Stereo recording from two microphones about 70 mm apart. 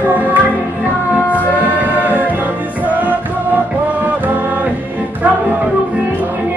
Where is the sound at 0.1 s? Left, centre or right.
Right.